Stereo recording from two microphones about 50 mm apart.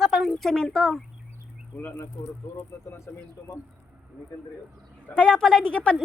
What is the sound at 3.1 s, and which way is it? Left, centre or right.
Speech, left.